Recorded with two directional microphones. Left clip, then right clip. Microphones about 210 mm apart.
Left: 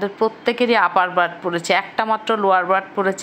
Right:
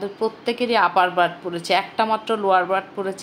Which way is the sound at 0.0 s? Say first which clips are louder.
Left 5 dB; 15° left (ahead or behind).